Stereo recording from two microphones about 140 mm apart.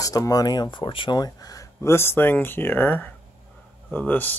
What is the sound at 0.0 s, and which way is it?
Speech, 25° left (ahead or behind).